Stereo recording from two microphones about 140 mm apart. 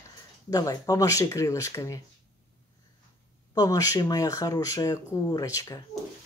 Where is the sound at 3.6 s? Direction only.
25° left (ahead or behind).